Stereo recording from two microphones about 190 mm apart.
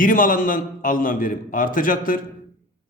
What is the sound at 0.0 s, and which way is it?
A man's voice, 45° left (ahead or behind).